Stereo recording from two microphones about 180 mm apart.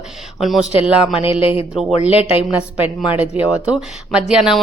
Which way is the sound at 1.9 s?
35° left (ahead or behind).